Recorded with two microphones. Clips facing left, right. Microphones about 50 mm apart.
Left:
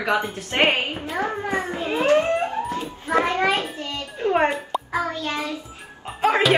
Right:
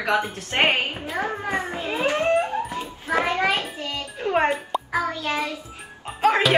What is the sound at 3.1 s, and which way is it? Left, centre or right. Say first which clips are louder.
Speech: left 2 dB; right.